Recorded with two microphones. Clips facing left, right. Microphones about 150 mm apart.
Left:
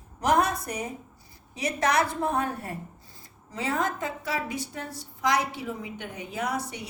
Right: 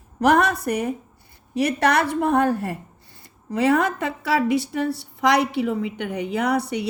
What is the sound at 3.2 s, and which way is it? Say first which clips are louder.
Speech: right 12 dB; 70° right (ahead or behind).